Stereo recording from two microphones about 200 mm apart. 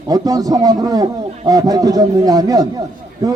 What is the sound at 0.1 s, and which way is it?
Speech, 20° right (ahead or behind).